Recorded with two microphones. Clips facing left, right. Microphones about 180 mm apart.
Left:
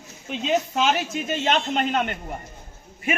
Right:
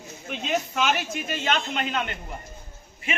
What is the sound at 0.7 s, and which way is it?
Speech, 30° left (ahead or behind).